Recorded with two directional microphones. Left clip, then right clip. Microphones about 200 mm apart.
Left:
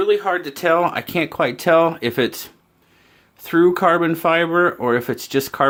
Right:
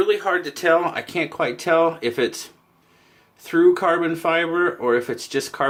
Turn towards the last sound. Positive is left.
turn(degrees=50)  # may be behind; listen again after turning